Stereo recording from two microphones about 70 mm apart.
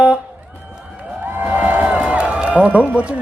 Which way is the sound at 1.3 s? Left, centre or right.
Right.